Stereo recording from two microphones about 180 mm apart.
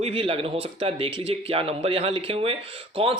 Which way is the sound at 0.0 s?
30° right (ahead or behind).